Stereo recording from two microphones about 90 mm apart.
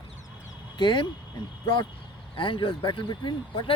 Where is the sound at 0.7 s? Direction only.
60° left (ahead or behind).